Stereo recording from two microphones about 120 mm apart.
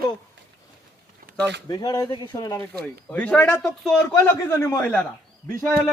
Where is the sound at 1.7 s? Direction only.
30° left (ahead or behind).